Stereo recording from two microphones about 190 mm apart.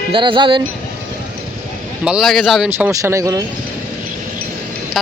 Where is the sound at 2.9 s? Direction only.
15° right (ahead or behind).